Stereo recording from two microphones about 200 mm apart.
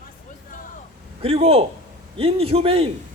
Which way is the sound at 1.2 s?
30° right (ahead or behind).